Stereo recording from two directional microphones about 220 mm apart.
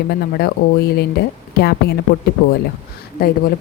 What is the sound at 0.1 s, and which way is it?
A woman's voice, 45° left (ahead or behind).